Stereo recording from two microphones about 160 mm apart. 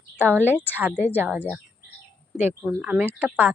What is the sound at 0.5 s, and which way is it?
Speech, 10° right (ahead or behind).